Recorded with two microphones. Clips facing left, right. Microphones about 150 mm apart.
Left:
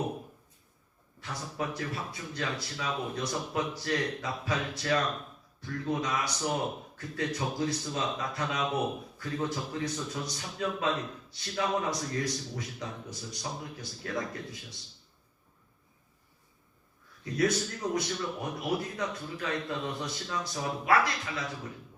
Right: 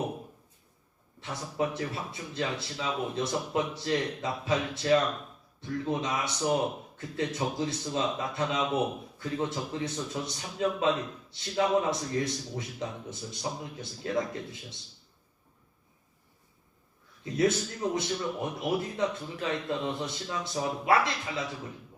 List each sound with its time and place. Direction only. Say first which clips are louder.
1.2 s a man's voice: right 4 dB; 25° right (ahead or behind)
17.2 s a man's voice: right 2 dB; 25° right (ahead or behind)